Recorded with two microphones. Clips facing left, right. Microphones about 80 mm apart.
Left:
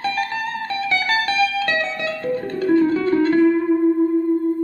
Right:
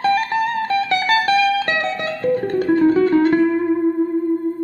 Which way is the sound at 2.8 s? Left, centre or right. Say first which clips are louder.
Right 4 dB; right.